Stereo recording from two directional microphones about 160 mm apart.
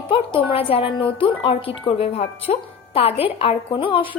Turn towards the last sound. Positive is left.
turn(degrees=35)  # may be behind; listen again after turning